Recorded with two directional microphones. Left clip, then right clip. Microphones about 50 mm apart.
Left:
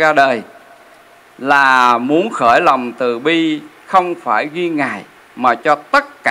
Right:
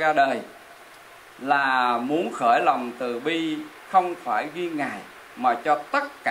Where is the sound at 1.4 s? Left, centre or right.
Left.